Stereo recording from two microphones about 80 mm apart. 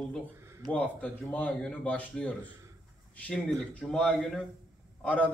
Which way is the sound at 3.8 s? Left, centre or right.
Centre.